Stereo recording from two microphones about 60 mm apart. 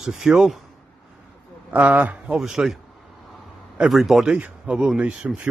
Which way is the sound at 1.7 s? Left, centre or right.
Right.